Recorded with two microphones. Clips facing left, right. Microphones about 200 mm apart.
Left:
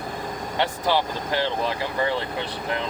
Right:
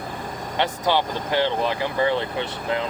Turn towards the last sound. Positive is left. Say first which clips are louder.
# right 3 dB
turn(degrees=-20)  # may be behind; listen again after turning